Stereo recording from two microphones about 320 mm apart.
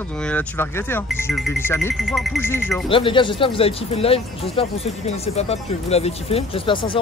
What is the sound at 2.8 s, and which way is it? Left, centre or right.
Speech, centre.